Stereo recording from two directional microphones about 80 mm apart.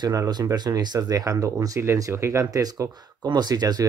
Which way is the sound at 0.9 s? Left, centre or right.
Right.